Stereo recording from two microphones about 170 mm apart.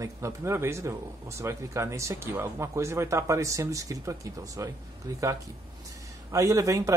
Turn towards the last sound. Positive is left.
turn(degrees=-20)  # may be behind; listen again after turning